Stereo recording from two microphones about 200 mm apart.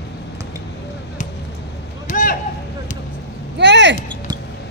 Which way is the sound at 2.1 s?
40° left (ahead or behind).